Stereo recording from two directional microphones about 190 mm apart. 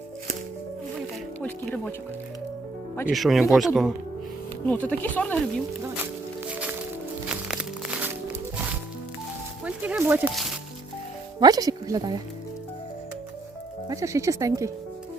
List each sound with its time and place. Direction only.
1.4 s speech: 5° left (ahead or behind)
3.1 s speech: centre (ahead or behind)
6.4 s music: 10° right (ahead or behind)
9.6 s speech: 5° right (ahead or behind)
11.3 s speech: 20° right (ahead or behind)
13.8 s speech: 15° right (ahead or behind)